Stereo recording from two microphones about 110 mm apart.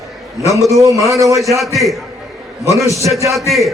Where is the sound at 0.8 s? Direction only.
30° right (ahead or behind).